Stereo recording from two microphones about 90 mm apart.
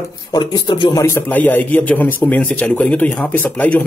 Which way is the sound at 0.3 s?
55° left (ahead or behind).